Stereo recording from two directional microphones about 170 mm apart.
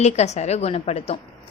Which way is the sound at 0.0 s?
40° left (ahead or behind).